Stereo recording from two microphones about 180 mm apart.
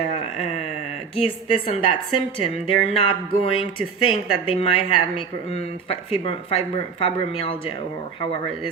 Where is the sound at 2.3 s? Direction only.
30° left (ahead or behind).